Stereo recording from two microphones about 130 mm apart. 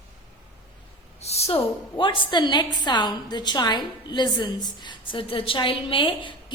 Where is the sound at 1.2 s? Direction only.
55° left (ahead or behind).